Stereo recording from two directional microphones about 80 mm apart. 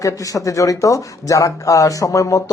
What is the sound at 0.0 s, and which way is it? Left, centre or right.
Speech, left.